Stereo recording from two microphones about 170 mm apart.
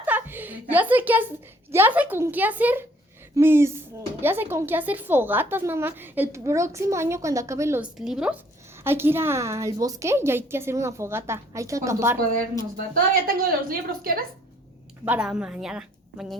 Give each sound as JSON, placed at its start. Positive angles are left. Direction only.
{"t": 0.0, "sound": "music", "side_deg": -10}
{"t": 1.7, "sound": "a woman's voice", "side_deg": -10}
{"t": 7.9, "sound": "a woman's voice", "side_deg": -5}
{"t": 12.7, "sound": "a woman's voice", "side_deg": -60}
{"t": 15.0, "sound": "a woman's voice", "side_deg": -10}